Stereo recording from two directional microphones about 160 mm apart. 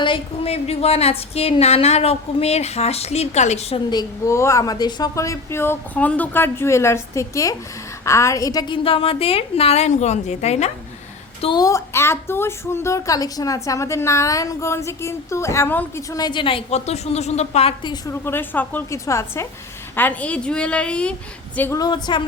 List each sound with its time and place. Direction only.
0.0 s a woman's voice: 35° left (ahead or behind)
3.8 s a woman's voice: 20° left (ahead or behind); by 10.7 s 45° left (ahead or behind)
11.4 s speech: 25° left (ahead or behind)
16.1 s a woman's voice: 30° left (ahead or behind)
18.0 s speech: 15° left (ahead or behind)
21.8 s a woman's voice: 25° left (ahead or behind)